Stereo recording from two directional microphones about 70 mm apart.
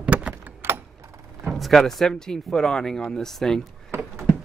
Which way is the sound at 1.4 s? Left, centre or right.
Centre.